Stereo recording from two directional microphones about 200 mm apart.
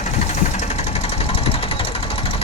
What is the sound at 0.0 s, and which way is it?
Engine, 35° left (ahead or behind).